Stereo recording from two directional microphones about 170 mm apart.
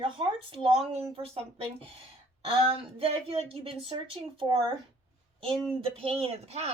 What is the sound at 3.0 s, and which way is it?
Speech, 35° right (ahead or behind).